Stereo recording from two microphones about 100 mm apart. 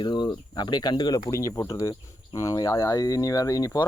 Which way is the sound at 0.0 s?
45° left (ahead or behind).